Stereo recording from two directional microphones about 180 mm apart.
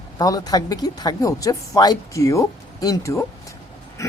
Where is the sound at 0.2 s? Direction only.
20° left (ahead or behind).